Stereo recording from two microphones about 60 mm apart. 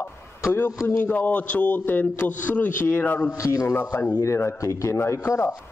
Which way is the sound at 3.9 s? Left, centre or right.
Left.